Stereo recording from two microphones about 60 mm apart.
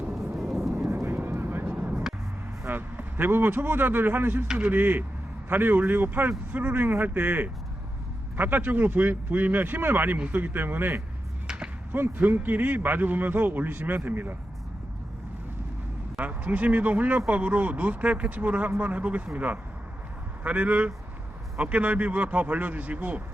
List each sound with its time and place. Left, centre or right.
0.1 s vehicle: centre
0.9 s vehicle: right
2.6 s speech: right
4.4 s speech: centre
4.7 s a man's voice: right
11.4 s arrow: centre
11.9 s a man's voice: right
16.1 s speech: right